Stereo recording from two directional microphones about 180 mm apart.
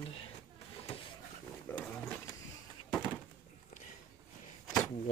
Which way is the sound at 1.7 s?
10° left (ahead or behind).